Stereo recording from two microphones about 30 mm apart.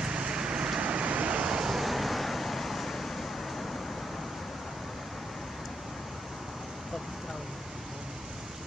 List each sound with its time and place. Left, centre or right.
0.0 s vehicle: right
1.7 s vehicle: centre